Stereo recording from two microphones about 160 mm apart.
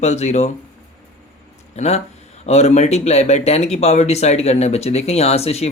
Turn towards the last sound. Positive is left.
turn(degrees=40)  # may be behind; listen again after turning